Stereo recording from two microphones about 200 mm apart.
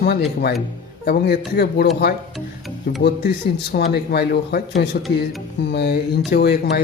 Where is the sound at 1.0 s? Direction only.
55° left (ahead or behind).